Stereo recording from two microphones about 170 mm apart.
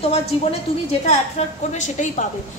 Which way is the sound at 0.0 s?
35° left (ahead or behind).